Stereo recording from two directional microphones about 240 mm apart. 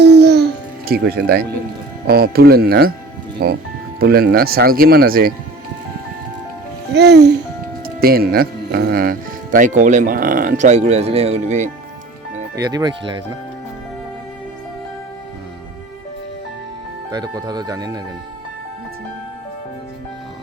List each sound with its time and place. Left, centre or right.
0.0 s music: right
0.9 s speech: right
6.9 s speech: right
12.5 s speech: centre
17.1 s speech: centre